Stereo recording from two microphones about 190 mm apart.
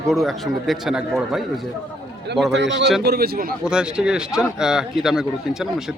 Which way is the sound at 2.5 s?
70° right (ahead or behind).